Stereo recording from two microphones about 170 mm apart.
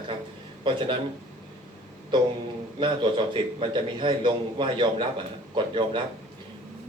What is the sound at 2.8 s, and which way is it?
Speech, 30° right (ahead or behind).